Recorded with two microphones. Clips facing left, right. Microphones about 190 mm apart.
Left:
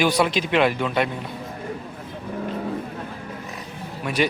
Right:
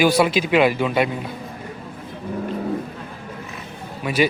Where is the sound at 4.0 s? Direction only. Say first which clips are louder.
Right 3 dB; 5° right (ahead or behind).